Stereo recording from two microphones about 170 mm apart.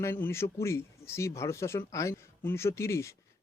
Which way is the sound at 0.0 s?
15° left (ahead or behind).